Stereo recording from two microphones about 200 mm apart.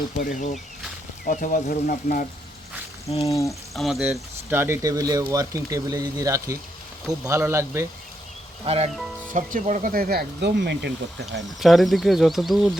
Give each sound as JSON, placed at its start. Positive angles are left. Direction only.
{"t": 0.2, "sound": "speech", "side_deg": 40}
{"t": 3.2, "sound": "speech", "side_deg": 15}
{"t": 3.8, "sound": "speech", "side_deg": 0}
{"t": 8.6, "sound": "speech", "side_deg": -30}
{"t": 11.6, "sound": "speech", "side_deg": 0}